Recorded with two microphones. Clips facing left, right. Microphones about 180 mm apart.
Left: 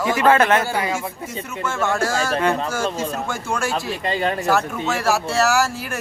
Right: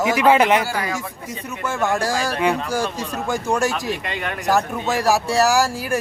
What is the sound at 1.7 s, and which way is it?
Speech, 15° right (ahead or behind).